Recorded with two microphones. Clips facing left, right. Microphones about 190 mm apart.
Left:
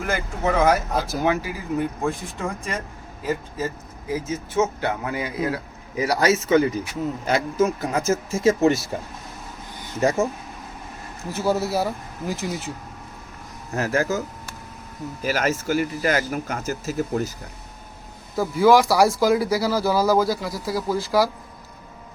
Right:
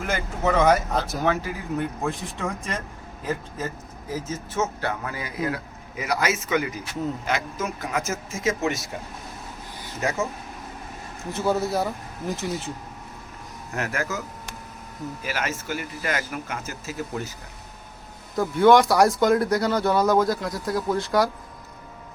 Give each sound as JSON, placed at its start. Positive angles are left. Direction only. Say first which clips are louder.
{"t": 0.0, "sound": "speech", "louder": "left 1 dB", "side_deg": 0}
{"t": 1.2, "sound": "speech", "louder": "left 2 dB", "side_deg": 10}
{"t": 4.1, "sound": "speech", "louder": "left 5 dB", "side_deg": 15}
{"t": 6.0, "sound": "speech", "louder": "left 5 dB", "side_deg": 35}
{"t": 11.3, "sound": "speech", "louder": "left 1 dB", "side_deg": 5}
{"t": 13.7, "sound": "speech", "louder": "left 6 dB", "side_deg": 30}
{"t": 15.2, "sound": "speech", "louder": "left 8 dB", "side_deg": 40}
{"t": 18.3, "sound": "speech", "louder": "even", "side_deg": 5}